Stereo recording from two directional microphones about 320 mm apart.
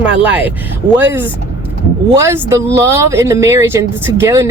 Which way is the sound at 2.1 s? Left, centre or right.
Centre.